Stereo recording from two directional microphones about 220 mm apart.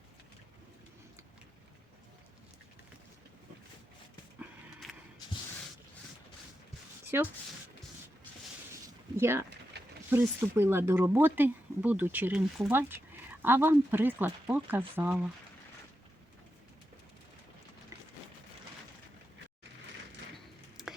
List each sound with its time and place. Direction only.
4.4 s a sound: centre (ahead or behind)
7.1 s speech: 10° right (ahead or behind)
9.1 s speech: 10° right (ahead or behind)
9.7 s mechanisms: 50° right (ahead or behind)
10.1 s speech: 10° right (ahead or behind)
20.3 s a sound: centre (ahead or behind)